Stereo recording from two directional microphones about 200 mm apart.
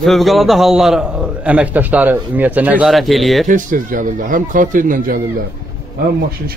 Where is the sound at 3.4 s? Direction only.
40° right (ahead or behind).